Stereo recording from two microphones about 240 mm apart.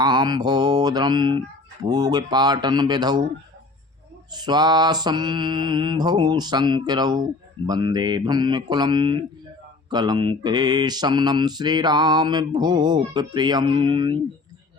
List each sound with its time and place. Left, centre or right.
0.0 s mantra: centre
4.3 s mantra: centre